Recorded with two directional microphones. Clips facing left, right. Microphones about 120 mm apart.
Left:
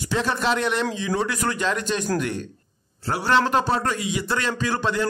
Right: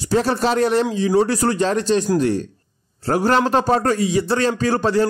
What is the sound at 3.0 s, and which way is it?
A man's voice, 45° right (ahead or behind).